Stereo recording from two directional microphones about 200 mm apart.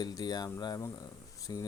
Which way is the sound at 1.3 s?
15° left (ahead or behind).